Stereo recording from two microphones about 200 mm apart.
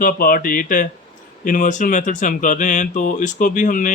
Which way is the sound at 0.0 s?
45° left (ahead or behind).